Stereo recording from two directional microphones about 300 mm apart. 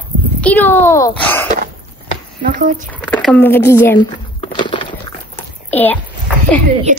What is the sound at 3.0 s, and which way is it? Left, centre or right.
A child's voice, centre.